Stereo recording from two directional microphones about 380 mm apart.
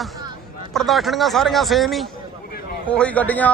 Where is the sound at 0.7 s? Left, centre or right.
Centre.